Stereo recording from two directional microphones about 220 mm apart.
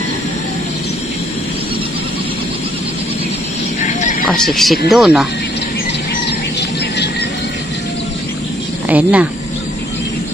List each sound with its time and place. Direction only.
3.8 s a sound: 30° left (ahead or behind)
4.3 s speech: centre (ahead or behind)
8.8 s speech: 5° right (ahead or behind)